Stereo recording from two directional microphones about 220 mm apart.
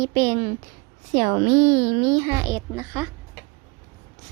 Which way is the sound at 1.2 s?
30° right (ahead or behind).